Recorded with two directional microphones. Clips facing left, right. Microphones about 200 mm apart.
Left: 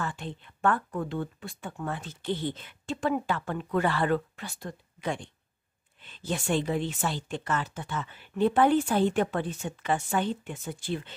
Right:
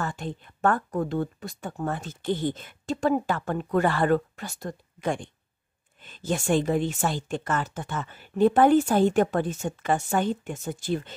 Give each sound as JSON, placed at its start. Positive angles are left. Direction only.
{"t": 0.0, "sound": "speech", "side_deg": -45}